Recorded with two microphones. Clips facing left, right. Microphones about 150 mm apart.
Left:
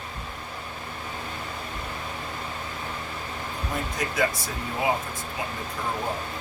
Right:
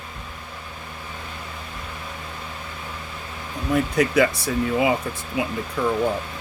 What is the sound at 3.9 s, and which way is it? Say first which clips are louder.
Speech: right 6 dB; 65° right (ahead or behind).